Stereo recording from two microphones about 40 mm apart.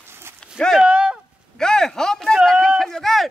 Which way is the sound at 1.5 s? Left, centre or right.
Centre.